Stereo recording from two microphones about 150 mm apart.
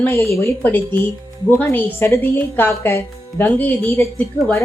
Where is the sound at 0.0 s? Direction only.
20° left (ahead or behind).